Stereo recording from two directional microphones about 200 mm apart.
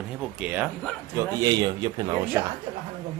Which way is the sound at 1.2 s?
20° right (ahead or behind).